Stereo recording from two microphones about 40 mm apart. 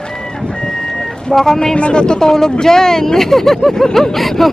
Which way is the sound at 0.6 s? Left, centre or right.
Centre.